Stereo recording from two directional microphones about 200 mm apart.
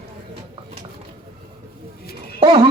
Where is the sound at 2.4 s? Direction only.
25° right (ahead or behind).